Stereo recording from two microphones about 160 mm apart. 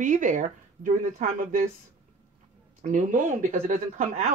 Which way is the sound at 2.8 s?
50° right (ahead or behind).